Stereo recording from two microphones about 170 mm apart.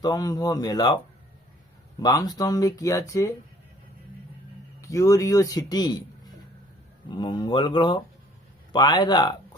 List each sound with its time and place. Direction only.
0.0 s speech: 20° left (ahead or behind)
2.0 s speech: 20° left (ahead or behind)
4.8 s a man's voice: 20° left (ahead or behind)